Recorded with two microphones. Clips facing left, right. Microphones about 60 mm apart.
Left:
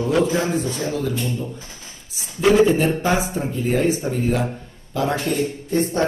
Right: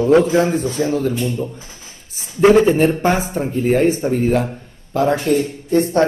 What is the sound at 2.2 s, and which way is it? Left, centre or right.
A man's voice, right.